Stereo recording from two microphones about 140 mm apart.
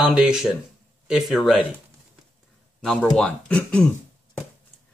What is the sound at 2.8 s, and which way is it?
Speech, 5° left (ahead or behind).